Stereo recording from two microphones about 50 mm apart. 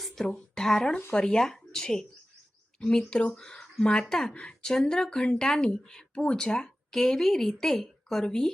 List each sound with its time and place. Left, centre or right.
0.3 s speech: centre